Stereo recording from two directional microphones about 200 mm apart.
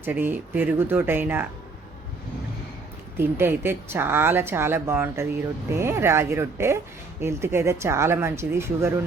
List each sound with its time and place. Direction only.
0.0 s speech: 10° right (ahead or behind)
3.2 s speech: 10° right (ahead or behind)